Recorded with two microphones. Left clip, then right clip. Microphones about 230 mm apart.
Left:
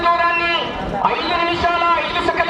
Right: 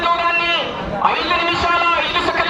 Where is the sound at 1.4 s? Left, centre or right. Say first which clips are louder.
Right 1 dB; centre.